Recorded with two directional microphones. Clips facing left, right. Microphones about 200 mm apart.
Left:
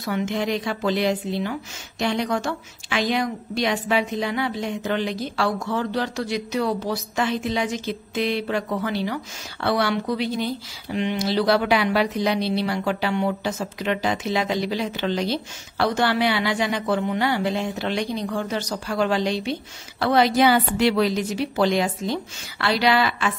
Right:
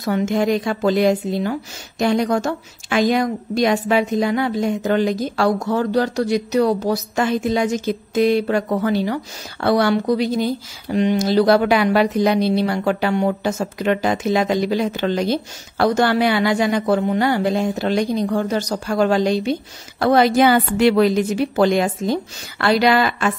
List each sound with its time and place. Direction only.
0.0 s a woman's voice: 45° right (ahead or behind)